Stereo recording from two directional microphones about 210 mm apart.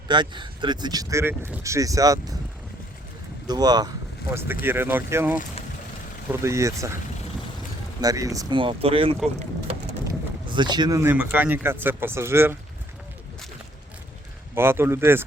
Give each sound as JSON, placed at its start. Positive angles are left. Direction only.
{"t": 0.1, "sound": "speech", "side_deg": -20}
{"t": 3.4, "sound": "speech", "side_deg": -20}
{"t": 8.0, "sound": "speech", "side_deg": -15}
{"t": 10.5, "sound": "speech", "side_deg": -20}
{"t": 14.5, "sound": "speech", "side_deg": -10}